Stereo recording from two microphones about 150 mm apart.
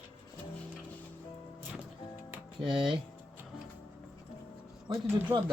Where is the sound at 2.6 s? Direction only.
30° right (ahead or behind).